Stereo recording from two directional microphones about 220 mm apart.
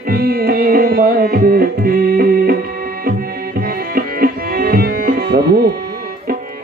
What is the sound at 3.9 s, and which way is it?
Music, 40° right (ahead or behind).